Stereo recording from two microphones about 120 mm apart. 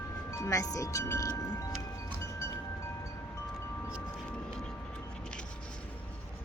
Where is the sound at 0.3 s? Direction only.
25° left (ahead or behind).